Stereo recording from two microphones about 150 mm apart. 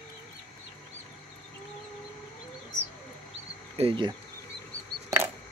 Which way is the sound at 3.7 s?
35° right (ahead or behind).